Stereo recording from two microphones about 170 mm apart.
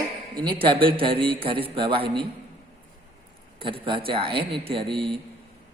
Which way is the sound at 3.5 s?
30° right (ahead or behind).